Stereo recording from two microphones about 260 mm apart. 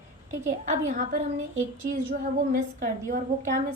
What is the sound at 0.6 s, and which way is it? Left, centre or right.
Speech, right.